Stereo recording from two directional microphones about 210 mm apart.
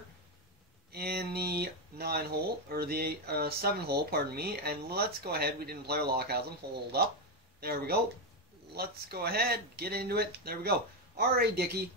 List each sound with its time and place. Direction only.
0.9 s speech: 50° right (ahead or behind)